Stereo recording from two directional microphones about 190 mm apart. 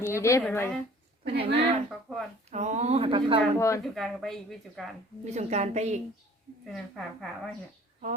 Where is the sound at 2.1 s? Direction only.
Centre (ahead or behind).